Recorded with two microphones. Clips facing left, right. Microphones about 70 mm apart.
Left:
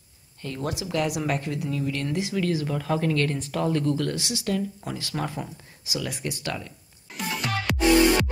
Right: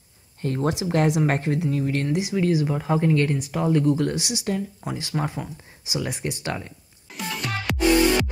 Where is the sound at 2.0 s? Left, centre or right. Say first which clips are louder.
Right 3 dB; centre.